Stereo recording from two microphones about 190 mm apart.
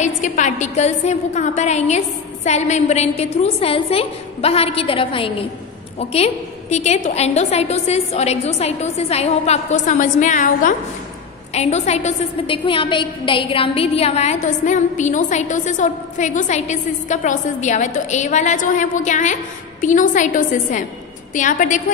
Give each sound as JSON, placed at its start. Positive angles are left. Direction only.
{"t": 0.0, "sound": "a woman's voice", "side_deg": 40}